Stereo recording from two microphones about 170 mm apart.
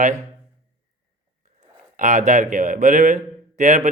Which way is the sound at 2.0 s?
45° right (ahead or behind).